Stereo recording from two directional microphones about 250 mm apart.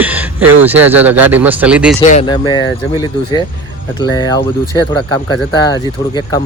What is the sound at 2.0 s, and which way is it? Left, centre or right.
Speech, left.